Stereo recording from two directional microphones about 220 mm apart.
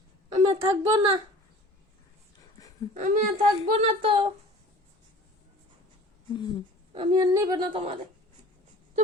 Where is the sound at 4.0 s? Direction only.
25° right (ahead or behind).